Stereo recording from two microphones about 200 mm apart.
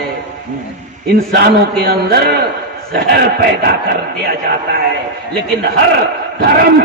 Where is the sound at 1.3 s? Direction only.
50° right (ahead or behind).